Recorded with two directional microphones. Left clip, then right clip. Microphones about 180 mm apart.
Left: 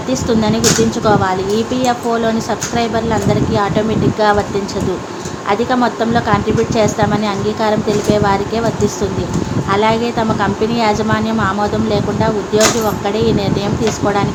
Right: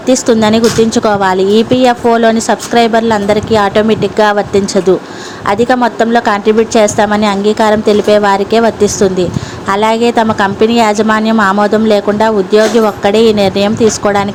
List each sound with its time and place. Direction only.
0.1 s a woman's voice: 50° right (ahead or behind)